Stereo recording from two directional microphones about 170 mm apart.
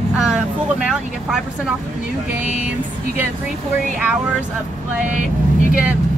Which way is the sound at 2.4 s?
45° left (ahead or behind).